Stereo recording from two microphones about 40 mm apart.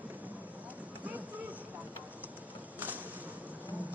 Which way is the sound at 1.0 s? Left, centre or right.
Right.